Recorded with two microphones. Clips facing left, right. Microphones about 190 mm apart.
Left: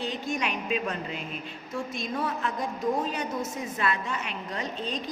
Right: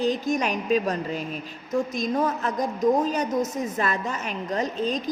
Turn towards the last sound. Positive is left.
turn(degrees=-45)  # may be behind; listen again after turning